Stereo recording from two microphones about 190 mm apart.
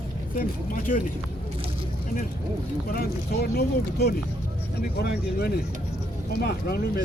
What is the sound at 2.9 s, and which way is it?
Speech, 55° left (ahead or behind).